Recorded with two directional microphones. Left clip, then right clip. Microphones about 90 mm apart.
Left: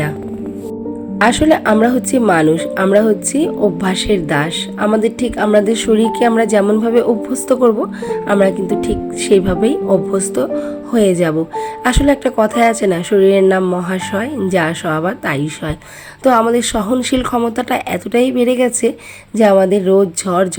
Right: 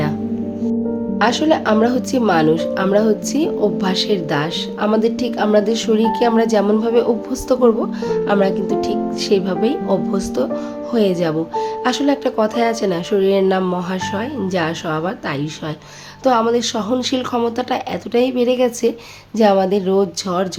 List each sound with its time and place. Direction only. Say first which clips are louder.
1.2 s a woman's voice: left 4 dB; 50° left (ahead or behind)
13.7 s speech: left 3 dB; 55° left (ahead or behind)